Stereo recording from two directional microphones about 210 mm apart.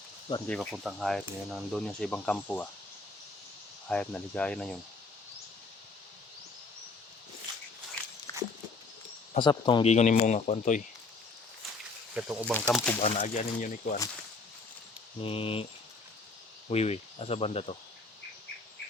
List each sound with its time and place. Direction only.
0.4 s speech: 5° left (ahead or behind)
3.8 s speech: 5° left (ahead or behind)
8.3 s a sound: 15° left (ahead or behind)
9.3 s speech: 20° left (ahead or behind)
12.1 s speech: 5° right (ahead or behind)
12.5 s speech: 5° left (ahead or behind)
13.0 s speech: 30° left (ahead or behind)
15.2 s speech: 25° left (ahead or behind)
16.6 s speech: 30° left (ahead or behind)